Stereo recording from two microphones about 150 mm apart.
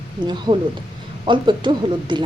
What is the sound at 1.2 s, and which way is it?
A woman's voice, 30° right (ahead or behind).